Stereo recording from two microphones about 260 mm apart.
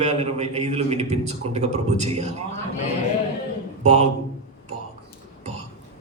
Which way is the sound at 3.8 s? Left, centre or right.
Right.